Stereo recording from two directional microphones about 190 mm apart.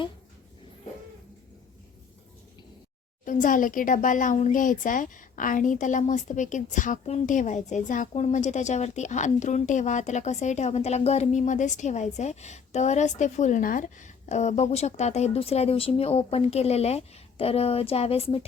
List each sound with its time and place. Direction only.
3.2 s speech: 40° left (ahead or behind)